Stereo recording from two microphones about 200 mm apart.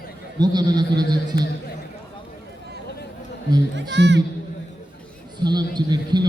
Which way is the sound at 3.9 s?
60° right (ahead or behind).